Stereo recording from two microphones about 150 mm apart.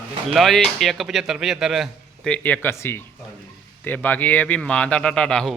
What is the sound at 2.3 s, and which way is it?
A man's voice, 10° left (ahead or behind).